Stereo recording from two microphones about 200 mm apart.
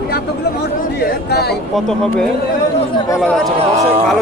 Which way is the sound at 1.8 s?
5° left (ahead or behind).